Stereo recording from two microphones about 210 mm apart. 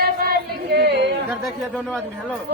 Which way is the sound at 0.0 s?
45° right (ahead or behind).